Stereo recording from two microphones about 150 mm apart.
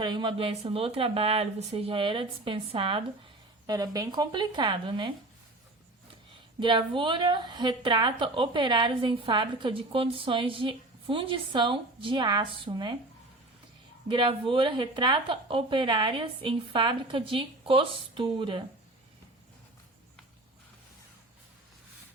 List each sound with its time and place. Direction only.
0.0 s a woman's voice: 30° right (ahead or behind)
6.6 s a woman's voice: 30° right (ahead or behind)
14.1 s a woman's voice: 35° right (ahead or behind)